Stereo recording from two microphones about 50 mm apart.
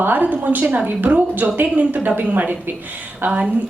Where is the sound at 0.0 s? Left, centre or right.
Right.